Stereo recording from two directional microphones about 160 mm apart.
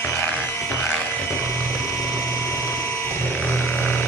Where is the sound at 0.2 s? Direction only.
15° left (ahead or behind).